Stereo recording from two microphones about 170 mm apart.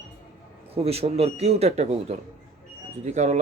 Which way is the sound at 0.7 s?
35° right (ahead or behind).